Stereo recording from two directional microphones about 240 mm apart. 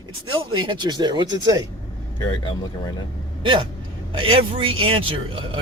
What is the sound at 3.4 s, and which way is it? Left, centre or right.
Speech, centre.